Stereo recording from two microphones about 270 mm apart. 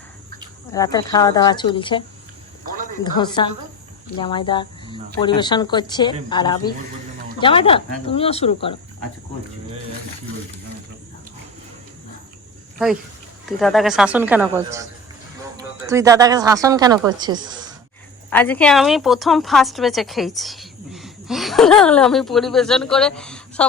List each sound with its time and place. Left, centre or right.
0.7 s speech: centre
13.4 s speech: centre
15.9 s speech: centre
18.3 s a woman's voice: centre